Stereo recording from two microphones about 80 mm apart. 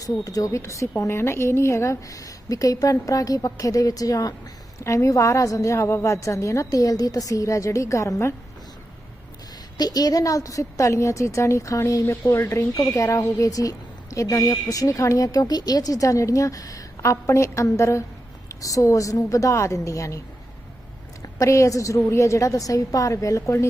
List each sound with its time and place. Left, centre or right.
0.0 s a woman's voice: left
9.7 s a woman's voice: left